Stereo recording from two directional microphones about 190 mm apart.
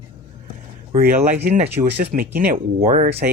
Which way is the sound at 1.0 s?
50° right (ahead or behind).